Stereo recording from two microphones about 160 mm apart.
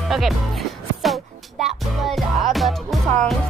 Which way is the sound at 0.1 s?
Centre (ahead or behind).